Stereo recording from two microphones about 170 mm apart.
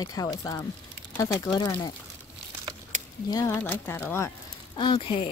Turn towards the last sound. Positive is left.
turn(degrees=30)  # may be behind; listen again after turning